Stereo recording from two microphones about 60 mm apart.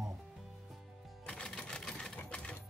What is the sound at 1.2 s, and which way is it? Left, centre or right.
Music, centre.